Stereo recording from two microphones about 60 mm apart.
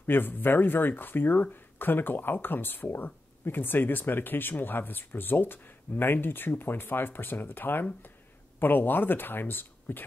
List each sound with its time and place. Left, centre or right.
0.0 s speech: left